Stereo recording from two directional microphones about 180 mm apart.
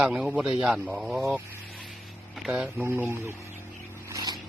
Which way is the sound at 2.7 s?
10° right (ahead or behind).